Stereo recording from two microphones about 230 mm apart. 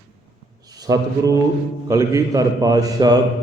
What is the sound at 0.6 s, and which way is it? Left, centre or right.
Mantra, centre.